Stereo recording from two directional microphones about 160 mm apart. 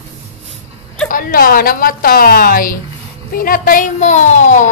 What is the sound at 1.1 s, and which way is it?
A woman's voice, 65° left (ahead or behind).